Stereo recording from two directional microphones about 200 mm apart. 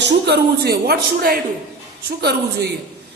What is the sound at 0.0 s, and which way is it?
Speech, 55° right (ahead or behind).